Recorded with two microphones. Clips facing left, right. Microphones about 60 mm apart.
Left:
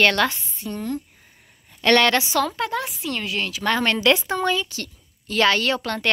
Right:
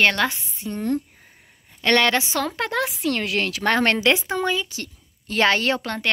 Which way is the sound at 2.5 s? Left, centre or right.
Right.